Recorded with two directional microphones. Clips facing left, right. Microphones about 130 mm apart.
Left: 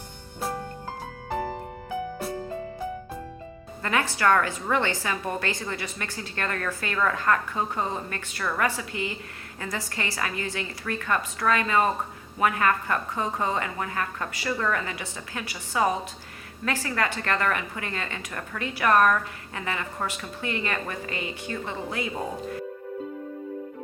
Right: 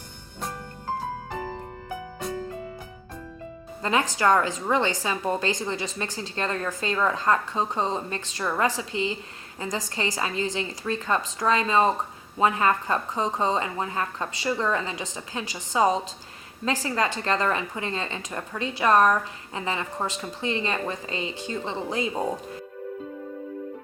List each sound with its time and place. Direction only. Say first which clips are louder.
3.8 s a woman's voice: right 1 dB; 20° right (ahead or behind)